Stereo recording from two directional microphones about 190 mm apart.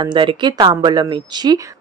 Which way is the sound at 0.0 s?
25° right (ahead or behind).